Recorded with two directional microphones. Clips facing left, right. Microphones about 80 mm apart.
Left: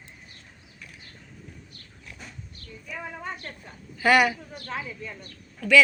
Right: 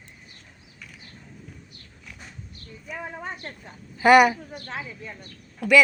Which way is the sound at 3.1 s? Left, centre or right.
Right.